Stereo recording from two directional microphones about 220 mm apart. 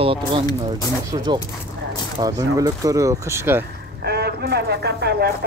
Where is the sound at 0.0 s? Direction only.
25° right (ahead or behind).